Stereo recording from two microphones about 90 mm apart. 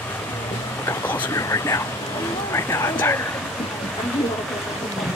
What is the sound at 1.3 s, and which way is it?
Speech, 35° left (ahead or behind).